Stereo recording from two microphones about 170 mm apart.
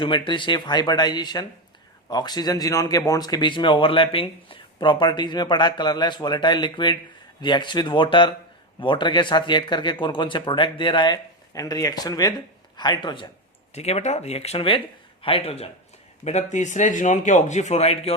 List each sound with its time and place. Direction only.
0.0 s speech: 30° left (ahead or behind)
13.7 s speech: 40° left (ahead or behind)